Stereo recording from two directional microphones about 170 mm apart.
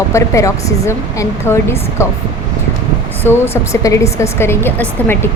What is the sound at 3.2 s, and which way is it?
Speech, 15° left (ahead or behind).